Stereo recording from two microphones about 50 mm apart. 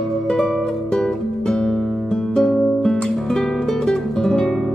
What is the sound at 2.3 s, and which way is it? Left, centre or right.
Music, centre.